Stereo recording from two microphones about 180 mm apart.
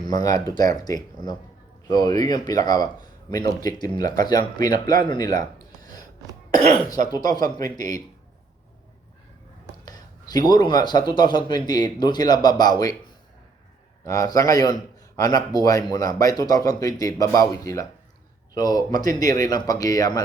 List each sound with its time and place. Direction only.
0.1 s a man's voice: 20° left (ahead or behind)
5.8 s a sound: 20° left (ahead or behind)
7.1 s a man's voice: 20° left (ahead or behind)
9.8 s a man's voice: 20° left (ahead or behind)
14.0 s a man's voice: 20° left (ahead or behind)